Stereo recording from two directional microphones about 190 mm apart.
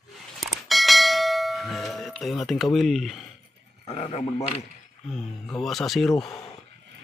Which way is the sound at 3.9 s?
30° left (ahead or behind).